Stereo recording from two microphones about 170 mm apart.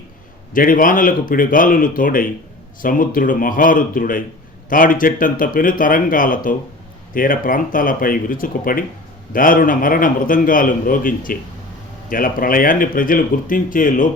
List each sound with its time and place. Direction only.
0.5 s speech: 55° left (ahead or behind)